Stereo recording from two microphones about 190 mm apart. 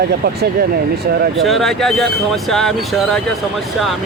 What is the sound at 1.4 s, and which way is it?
Speech, centre (ahead or behind).